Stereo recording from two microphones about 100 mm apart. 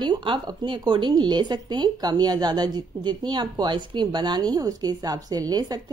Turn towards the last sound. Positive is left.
turn(degrees=-40)  # may be behind; listen again after turning